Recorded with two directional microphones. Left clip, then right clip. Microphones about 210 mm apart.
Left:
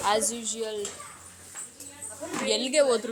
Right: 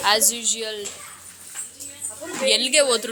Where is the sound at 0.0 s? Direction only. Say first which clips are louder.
Right 6 dB; 10° left (ahead or behind).